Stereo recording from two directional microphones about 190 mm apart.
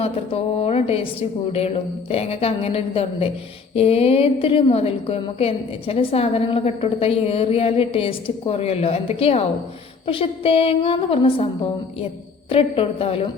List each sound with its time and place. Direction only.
0.0 s a woman's voice: 30° left (ahead or behind)